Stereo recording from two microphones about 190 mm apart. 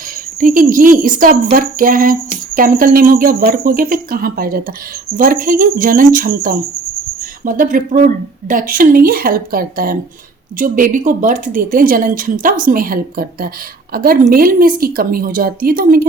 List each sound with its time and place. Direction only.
0.3 s speech: 45° right (ahead or behind)